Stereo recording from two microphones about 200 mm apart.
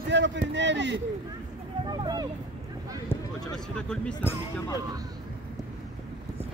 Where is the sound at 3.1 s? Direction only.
20° left (ahead or behind).